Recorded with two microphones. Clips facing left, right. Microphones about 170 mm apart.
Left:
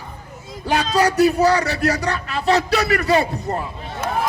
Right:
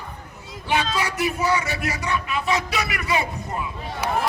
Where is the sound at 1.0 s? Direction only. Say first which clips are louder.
Left 9 dB; 70° left (ahead or behind).